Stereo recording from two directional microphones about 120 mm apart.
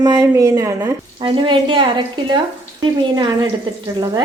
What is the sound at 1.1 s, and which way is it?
Speech, 50° right (ahead or behind).